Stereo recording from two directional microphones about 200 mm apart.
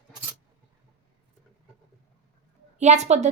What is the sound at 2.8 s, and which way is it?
Speech, 35° right (ahead or behind).